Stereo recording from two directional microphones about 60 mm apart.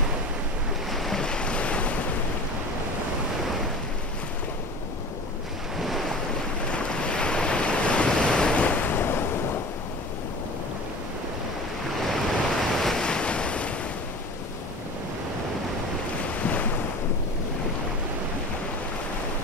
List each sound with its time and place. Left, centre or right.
0.9 s waves: centre
1.2 s waves: centre
5.8 s waves: centre
6.7 s waves: centre; by 9.6 s left
12.0 s waves: centre
16.3 s waves: left